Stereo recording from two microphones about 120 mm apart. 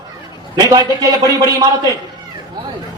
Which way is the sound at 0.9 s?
30° right (ahead or behind).